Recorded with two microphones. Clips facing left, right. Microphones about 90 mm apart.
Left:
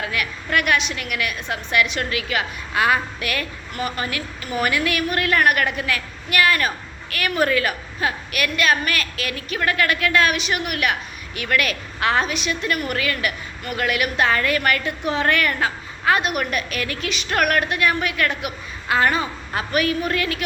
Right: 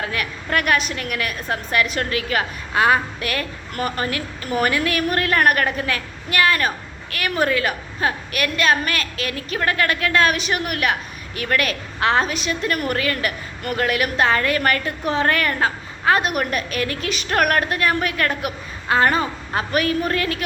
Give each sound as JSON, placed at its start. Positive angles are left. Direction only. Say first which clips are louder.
{"t": 0.0, "sound": "a woman's voice", "louder": "even", "side_deg": -35}